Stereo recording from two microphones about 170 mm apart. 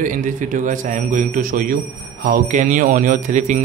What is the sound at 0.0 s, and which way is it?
Speech, 50° right (ahead or behind).